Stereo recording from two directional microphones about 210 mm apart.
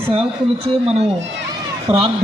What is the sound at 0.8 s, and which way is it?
Speech, 30° right (ahead or behind).